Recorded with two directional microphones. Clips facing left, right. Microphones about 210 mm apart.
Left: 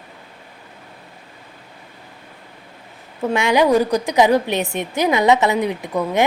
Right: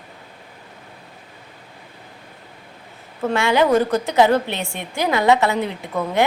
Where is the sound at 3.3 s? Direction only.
15° left (ahead or behind).